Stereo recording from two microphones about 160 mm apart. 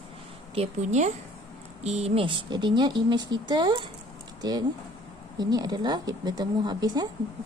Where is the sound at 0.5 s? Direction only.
45° right (ahead or behind).